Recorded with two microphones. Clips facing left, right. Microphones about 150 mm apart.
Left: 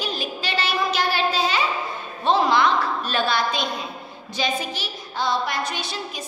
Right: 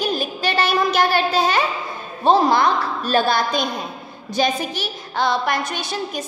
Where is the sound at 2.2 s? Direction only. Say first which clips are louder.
Right 3 dB; 40° right (ahead or behind).